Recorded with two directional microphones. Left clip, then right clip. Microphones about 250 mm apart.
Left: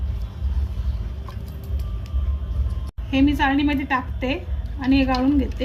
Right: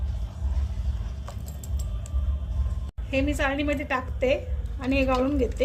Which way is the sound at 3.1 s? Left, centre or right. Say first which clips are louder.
Left 6 dB; right.